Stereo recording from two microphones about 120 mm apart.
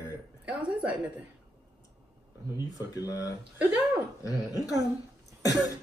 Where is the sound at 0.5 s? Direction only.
10° right (ahead or behind).